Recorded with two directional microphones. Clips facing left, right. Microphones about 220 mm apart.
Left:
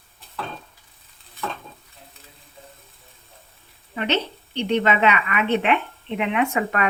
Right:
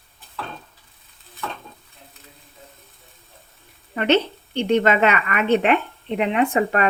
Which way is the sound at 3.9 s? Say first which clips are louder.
Right 6 dB; 50° right (ahead or behind).